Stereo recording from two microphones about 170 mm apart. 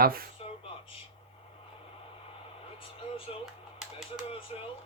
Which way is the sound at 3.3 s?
35° left (ahead or behind).